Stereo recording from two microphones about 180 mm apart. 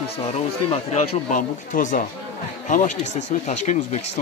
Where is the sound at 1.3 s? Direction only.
45° left (ahead or behind).